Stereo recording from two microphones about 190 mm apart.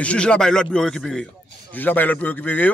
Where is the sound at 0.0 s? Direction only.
5° left (ahead or behind).